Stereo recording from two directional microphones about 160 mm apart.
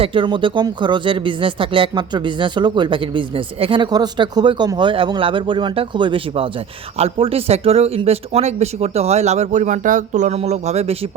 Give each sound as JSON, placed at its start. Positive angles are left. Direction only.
{"t": 0.0, "sound": "speech", "side_deg": -30}